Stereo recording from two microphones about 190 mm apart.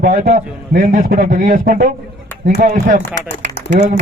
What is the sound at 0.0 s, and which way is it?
A man's voice, 45° right (ahead or behind).